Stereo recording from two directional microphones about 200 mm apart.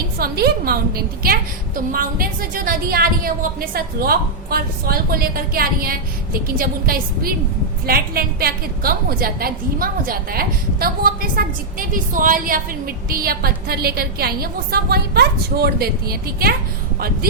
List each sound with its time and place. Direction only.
0.2 s a woman's voice: 50° right (ahead or behind)